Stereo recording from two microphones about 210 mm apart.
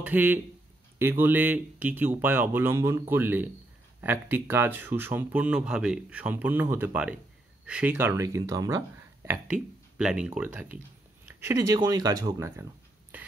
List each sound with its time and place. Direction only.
0.0 s speech: 10° right (ahead or behind)